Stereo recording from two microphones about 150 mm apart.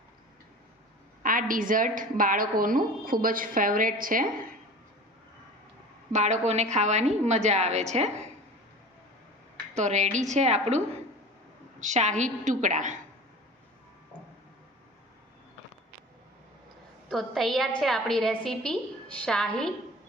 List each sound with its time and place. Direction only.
1.2 s a woman's voice: 65° right (ahead or behind)
6.1 s a woman's voice: 50° right (ahead or behind)
9.7 s a woman's voice: 50° right (ahead or behind)
17.1 s a woman's voice: centre (ahead or behind)